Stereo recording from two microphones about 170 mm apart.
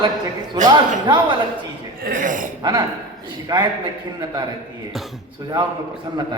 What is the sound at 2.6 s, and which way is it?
A man's voice, 20° right (ahead or behind).